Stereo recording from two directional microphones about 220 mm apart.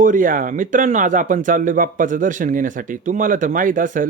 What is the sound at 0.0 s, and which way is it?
Speech, 35° right (ahead or behind).